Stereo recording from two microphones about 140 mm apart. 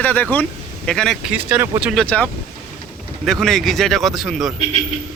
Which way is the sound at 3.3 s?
5° left (ahead or behind).